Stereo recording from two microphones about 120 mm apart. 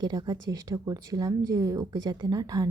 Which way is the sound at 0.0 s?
35° right (ahead or behind).